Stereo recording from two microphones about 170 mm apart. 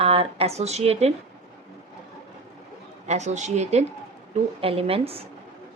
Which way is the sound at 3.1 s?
40° right (ahead or behind).